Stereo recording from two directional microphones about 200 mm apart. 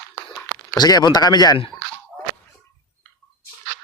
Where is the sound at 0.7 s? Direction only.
20° left (ahead or behind).